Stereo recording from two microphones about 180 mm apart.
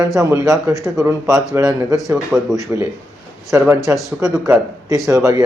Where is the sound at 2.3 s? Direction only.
Centre (ahead or behind).